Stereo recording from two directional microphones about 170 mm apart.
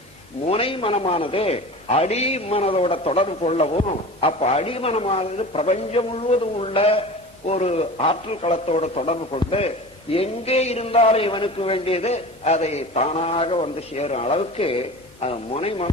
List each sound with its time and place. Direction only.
0.4 s a man's voice: 35° left (ahead or behind)